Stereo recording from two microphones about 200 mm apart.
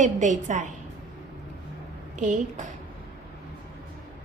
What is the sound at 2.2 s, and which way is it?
Speech, 40° right (ahead or behind).